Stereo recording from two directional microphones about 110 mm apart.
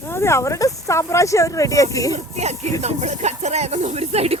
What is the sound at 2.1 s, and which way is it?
Speech, 90° right.